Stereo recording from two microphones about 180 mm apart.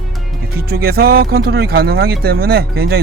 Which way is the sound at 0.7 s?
60° right (ahead or behind).